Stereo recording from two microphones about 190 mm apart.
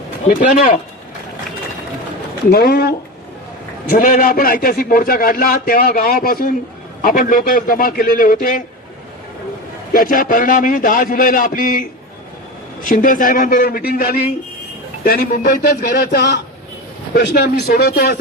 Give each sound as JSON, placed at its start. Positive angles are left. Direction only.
{"t": 0.3, "sound": "a man's voice", "side_deg": 45}
{"t": 2.5, "sound": "a man's voice", "side_deg": 50}
{"t": 9.9, "sound": "a man's voice", "side_deg": 45}